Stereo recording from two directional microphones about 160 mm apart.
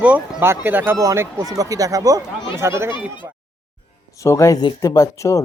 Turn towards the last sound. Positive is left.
turn(degrees=20)  # may be behind; listen again after turning